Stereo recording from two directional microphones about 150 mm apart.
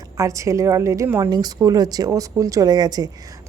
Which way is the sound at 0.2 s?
20° right (ahead or behind).